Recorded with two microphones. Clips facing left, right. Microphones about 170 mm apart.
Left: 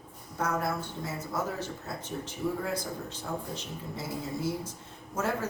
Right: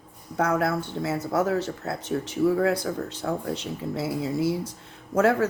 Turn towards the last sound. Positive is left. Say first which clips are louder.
# right 10 dB
turn(degrees=-70)  # may be behind; listen again after turning